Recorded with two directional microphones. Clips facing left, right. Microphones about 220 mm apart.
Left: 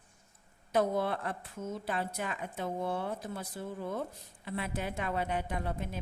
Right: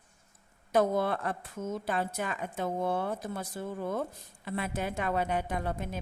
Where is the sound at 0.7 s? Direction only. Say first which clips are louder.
Right 3 dB; 45° right (ahead or behind).